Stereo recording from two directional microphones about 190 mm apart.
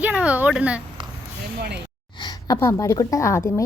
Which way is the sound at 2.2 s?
15° left (ahead or behind).